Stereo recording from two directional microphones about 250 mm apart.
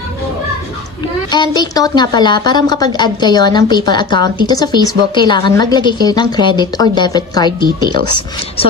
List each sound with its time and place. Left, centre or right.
1.3 s a woman's voice: centre